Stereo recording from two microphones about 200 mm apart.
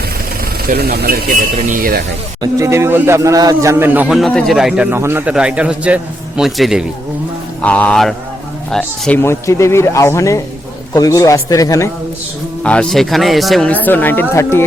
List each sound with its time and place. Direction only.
0.7 s speech: 50° right (ahead or behind)
2.4 s speech: 15° right (ahead or behind); by 11.9 s 15° left (ahead or behind)
12.6 s speech: 5° left (ahead or behind)